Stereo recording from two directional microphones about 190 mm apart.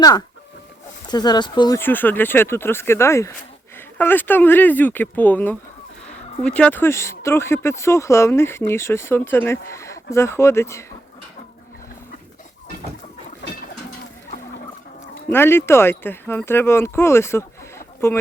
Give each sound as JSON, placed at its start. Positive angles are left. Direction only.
{"t": 1.0, "sound": "speech", "side_deg": 20}
{"t": 1.8, "sound": "speech", "side_deg": 10}
{"t": 15.3, "sound": "speech", "side_deg": 10}